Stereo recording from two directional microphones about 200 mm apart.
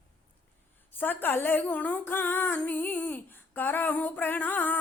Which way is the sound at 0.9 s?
10° left (ahead or behind).